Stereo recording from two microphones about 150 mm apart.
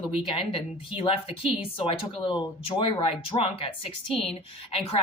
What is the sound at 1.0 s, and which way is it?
Speech, 40° left (ahead or behind).